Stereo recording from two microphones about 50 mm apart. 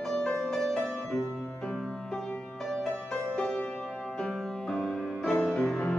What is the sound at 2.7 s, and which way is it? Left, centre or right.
Music, centre.